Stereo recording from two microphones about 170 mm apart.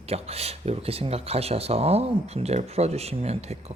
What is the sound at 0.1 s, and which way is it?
Speech, 35° right (ahead or behind).